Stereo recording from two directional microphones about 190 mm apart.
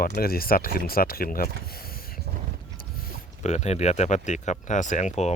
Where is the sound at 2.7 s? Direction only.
50° left (ahead or behind).